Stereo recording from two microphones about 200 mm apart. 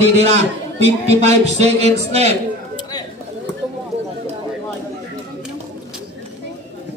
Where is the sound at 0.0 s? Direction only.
30° right (ahead or behind).